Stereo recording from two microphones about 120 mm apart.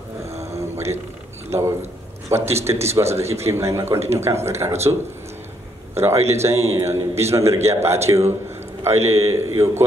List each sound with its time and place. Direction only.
0.5 s a sound: 20° right (ahead or behind)
1.5 s a man's voice: 20° right (ahead or behind)
5.9 s a man's voice: 20° right (ahead or behind)